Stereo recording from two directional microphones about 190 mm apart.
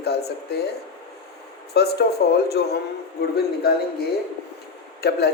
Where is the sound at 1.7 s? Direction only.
60° left (ahead or behind).